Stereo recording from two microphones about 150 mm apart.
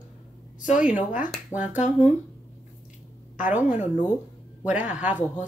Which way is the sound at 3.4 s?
10° right (ahead or behind).